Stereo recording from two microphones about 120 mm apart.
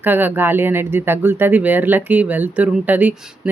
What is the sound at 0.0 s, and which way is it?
Speech, 15° right (ahead or behind).